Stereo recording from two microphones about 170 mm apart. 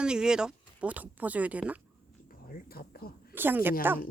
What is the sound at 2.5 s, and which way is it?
Speech, 60° left (ahead or behind).